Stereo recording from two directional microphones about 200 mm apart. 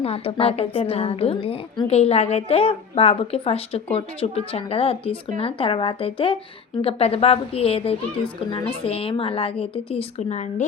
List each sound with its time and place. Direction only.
0.0 s a woman's voice: 30° left (ahead or behind)